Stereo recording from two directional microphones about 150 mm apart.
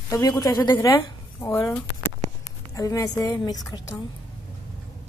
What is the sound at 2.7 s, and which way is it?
A woman's voice, 20° left (ahead or behind).